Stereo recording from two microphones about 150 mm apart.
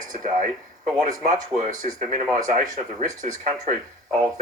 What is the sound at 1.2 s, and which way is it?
Speech, 50° right (ahead or behind).